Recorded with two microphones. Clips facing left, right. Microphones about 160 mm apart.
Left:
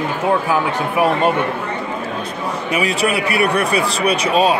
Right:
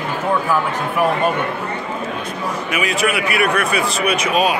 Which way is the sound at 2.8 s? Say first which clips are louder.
Left 1 dB; 30° left (ahead or behind).